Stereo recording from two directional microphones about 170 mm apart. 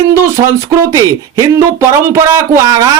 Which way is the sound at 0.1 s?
15° right (ahead or behind).